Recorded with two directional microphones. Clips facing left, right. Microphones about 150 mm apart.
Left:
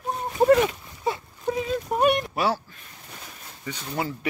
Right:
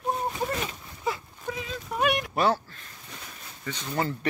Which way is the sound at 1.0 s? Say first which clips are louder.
Left 3 dB; 35° left (ahead or behind).